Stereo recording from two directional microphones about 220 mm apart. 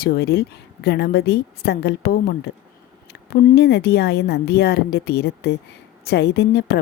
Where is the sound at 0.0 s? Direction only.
45° left (ahead or behind).